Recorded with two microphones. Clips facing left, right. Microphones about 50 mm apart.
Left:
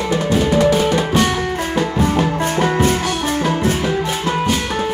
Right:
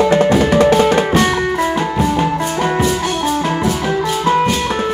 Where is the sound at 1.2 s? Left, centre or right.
Right.